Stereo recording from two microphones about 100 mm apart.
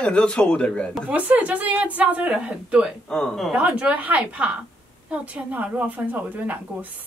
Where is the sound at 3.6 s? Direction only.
15° right (ahead or behind).